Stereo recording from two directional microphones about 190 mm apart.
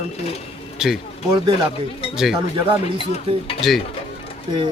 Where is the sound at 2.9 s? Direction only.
30° left (ahead or behind).